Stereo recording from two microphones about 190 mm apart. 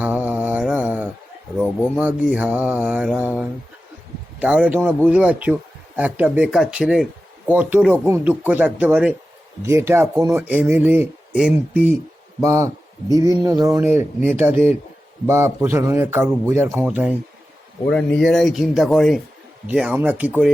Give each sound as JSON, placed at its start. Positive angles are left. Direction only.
{"t": 0.0, "sound": "mantra", "side_deg": -10}
{"t": 2.0, "sound": "speech", "side_deg": -5}
{"t": 12.4, "sound": "speech", "side_deg": -15}
{"t": 17.9, "sound": "speech", "side_deg": 5}